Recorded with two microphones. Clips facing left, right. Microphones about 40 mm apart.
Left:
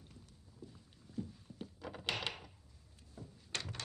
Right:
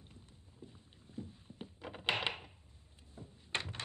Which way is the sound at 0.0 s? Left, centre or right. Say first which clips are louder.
Even; right.